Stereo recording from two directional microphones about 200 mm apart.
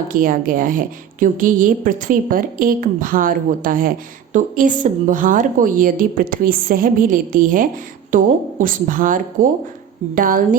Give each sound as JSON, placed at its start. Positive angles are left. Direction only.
{"t": 0.1, "sound": "a woman's voice", "side_deg": -45}